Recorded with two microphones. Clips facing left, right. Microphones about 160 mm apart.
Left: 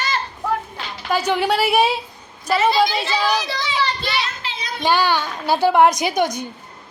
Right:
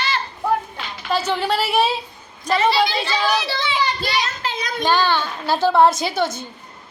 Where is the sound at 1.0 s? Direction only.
10° left (ahead or behind).